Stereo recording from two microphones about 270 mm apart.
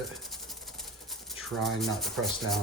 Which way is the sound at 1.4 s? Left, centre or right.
Centre.